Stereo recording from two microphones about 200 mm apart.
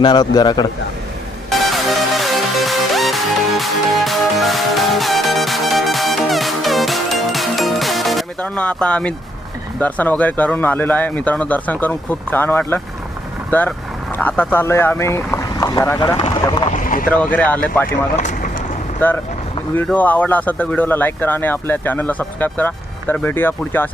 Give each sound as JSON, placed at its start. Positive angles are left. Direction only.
{"t": 0.0, "sound": "a man's voice", "side_deg": 20}
{"t": 1.5, "sound": "music", "side_deg": 0}
{"t": 9.8, "sound": "speech", "side_deg": 10}
{"t": 16.0, "sound": "speech", "side_deg": 25}
{"t": 16.7, "sound": "boat", "side_deg": 45}
{"t": 17.3, "sound": "speech", "side_deg": 5}
{"t": 17.8, "sound": "speech", "side_deg": 40}
{"t": 19.0, "sound": "speech", "side_deg": 10}